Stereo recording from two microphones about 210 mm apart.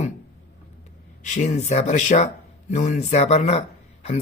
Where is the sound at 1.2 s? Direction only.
35° left (ahead or behind).